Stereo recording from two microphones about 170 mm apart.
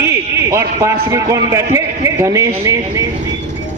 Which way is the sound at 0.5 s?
15° right (ahead or behind).